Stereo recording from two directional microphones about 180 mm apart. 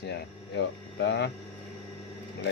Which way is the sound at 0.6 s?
85° left.